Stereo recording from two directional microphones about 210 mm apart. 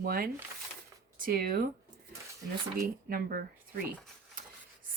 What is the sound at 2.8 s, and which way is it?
Speech, 45° right (ahead or behind).